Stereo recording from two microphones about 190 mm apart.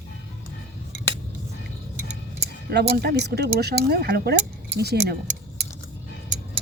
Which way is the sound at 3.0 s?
60° right (ahead or behind).